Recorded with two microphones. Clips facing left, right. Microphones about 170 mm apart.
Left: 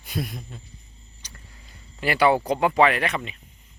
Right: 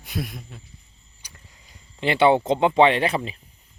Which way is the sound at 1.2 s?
10° right (ahead or behind).